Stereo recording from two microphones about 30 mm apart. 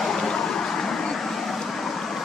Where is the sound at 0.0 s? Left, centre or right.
Centre.